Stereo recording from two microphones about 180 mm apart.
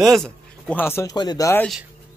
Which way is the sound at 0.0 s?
Centre (ahead or behind).